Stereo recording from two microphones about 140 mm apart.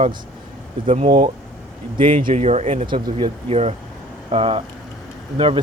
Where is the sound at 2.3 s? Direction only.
50° right (ahead or behind).